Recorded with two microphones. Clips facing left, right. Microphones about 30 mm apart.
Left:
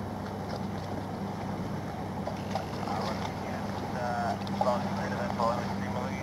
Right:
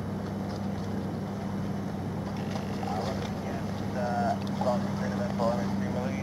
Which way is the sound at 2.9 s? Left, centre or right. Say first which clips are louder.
Even; left.